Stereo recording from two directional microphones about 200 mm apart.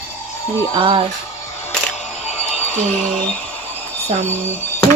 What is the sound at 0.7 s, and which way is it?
Speech, 25° right (ahead or behind).